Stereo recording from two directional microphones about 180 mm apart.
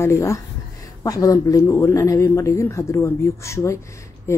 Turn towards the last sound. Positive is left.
turn(degrees=15)  # may be behind; listen again after turning